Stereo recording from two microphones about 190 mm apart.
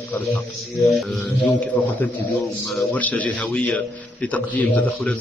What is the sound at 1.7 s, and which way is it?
A man's voice, 10° left (ahead or behind).